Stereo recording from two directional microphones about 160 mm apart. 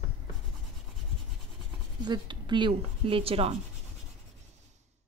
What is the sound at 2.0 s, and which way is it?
Speech, 30° right (ahead or behind).